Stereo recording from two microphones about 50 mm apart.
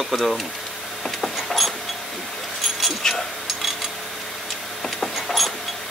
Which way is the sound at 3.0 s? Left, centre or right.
Centre.